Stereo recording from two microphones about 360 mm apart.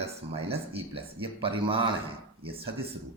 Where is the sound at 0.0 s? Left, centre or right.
Centre.